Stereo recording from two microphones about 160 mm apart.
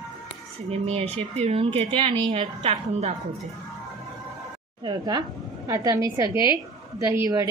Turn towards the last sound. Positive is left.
turn(degrees=-15)  # may be behind; listen again after turning